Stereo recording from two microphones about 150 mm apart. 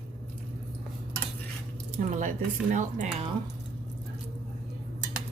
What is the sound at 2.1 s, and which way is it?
Speech, 55° right (ahead or behind).